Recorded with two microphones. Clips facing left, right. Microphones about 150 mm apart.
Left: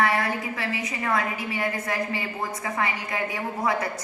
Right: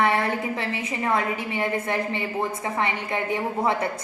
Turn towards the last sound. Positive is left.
turn(degrees=-25)  # may be behind; listen again after turning